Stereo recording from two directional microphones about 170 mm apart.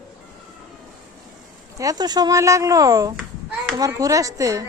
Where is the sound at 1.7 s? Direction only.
20° right (ahead or behind).